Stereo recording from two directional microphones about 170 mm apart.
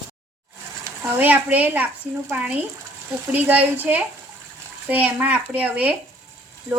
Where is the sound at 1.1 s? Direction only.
10° right (ahead or behind).